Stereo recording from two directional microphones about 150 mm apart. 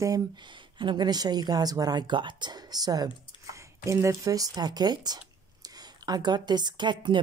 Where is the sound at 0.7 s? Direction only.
30° right (ahead or behind).